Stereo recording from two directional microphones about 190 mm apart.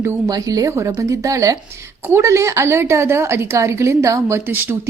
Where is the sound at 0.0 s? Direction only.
15° right (ahead or behind).